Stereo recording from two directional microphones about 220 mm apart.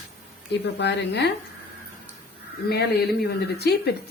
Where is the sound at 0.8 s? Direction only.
50° left (ahead or behind).